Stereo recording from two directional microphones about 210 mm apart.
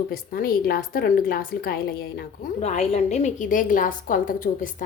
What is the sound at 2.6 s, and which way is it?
A woman's voice, 30° left (ahead or behind).